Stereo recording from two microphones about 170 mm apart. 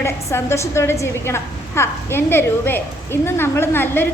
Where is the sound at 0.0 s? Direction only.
15° left (ahead or behind).